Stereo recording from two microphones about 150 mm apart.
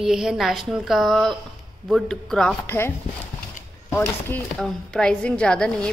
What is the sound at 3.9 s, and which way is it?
A woman's voice, 15° left (ahead or behind).